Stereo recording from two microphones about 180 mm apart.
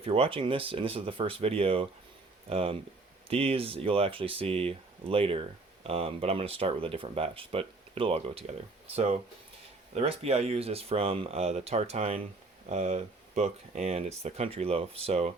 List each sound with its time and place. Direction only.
0.0 s speech: 30° right (ahead or behind)